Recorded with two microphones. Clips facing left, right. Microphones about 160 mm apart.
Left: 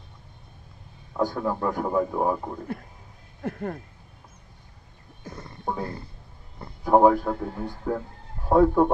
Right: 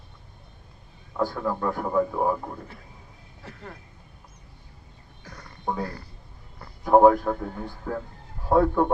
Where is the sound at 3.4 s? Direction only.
50° left (ahead or behind).